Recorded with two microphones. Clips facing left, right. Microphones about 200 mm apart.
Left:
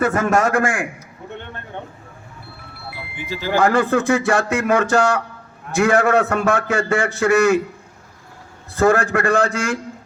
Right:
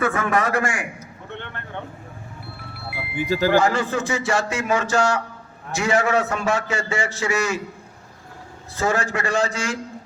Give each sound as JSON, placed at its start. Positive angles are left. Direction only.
{"t": 0.0, "sound": "a man's voice", "side_deg": 45}
{"t": 3.2, "sound": "speech", "side_deg": -40}
{"t": 3.6, "sound": "a man's voice", "side_deg": 55}
{"t": 8.7, "sound": "a man's voice", "side_deg": 55}